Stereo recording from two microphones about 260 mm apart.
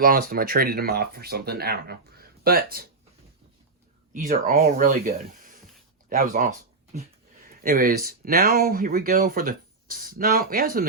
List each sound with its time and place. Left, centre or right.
0.0 s speech: right
4.1 s speech: right